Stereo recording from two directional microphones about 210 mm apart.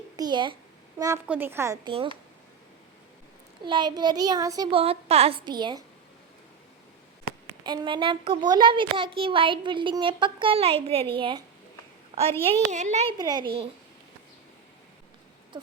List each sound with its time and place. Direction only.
0.2 s a child's voice: 20° right (ahead or behind)
3.7 s a child's voice: 20° right (ahead or behind)
7.6 s a child's voice: 20° right (ahead or behind)
13.1 s a child's voice: 20° right (ahead or behind)